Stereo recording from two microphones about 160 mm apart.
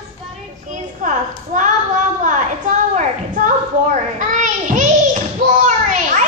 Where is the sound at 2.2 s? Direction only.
50° right (ahead or behind).